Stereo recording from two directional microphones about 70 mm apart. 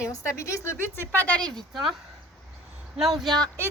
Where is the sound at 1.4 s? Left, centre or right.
Right.